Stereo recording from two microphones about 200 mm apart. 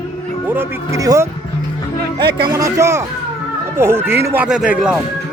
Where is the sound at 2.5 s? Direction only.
15° right (ahead or behind).